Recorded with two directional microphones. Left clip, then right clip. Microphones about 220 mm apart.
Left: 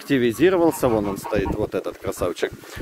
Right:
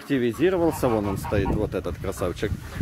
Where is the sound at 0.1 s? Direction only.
55° left (ahead or behind); by 2.3 s 30° left (ahead or behind).